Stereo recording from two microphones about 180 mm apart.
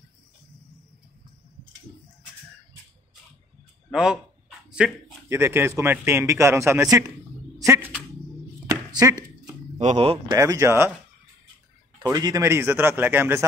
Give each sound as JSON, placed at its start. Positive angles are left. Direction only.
{"t": 3.9, "sound": "speech", "side_deg": -5}
{"t": 4.6, "sound": "a sound", "side_deg": -5}
{"t": 5.3, "sound": "a man's voice", "side_deg": -15}
{"t": 7.5, "sound": "a sound", "side_deg": -15}
{"t": 9.8, "sound": "speech", "side_deg": -35}
{"t": 10.3, "sound": "a man's voice", "side_deg": -20}
{"t": 12.0, "sound": "a man's voice", "side_deg": -20}